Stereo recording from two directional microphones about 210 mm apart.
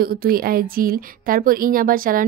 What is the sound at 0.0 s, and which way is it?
Speech, 45° right (ahead or behind).